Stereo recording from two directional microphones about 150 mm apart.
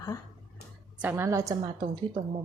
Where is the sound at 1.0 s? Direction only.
15° right (ahead or behind).